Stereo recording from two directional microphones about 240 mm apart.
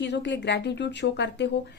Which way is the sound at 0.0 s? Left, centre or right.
Left.